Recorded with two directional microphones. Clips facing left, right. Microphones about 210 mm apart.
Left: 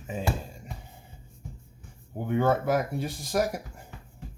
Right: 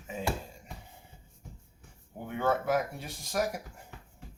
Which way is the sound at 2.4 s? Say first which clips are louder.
Left 2 dB; 35° left (ahead or behind).